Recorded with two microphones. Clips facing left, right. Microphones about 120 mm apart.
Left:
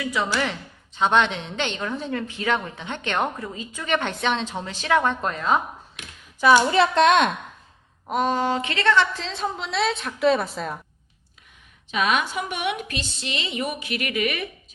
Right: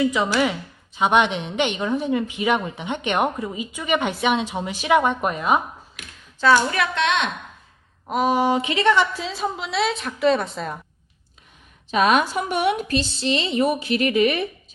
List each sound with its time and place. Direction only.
0.0 s a woman's voice: 15° right (ahead or behind)
6.7 s a woman's voice: 30° left (ahead or behind)
8.0 s a woman's voice: 5° right (ahead or behind)
11.9 s a woman's voice: 40° right (ahead or behind)